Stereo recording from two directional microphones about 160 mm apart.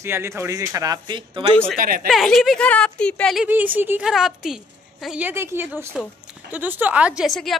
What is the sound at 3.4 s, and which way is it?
A woman's voice, 10° right (ahead or behind).